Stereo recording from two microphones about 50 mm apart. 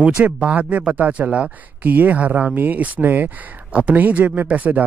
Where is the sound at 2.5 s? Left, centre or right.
Right.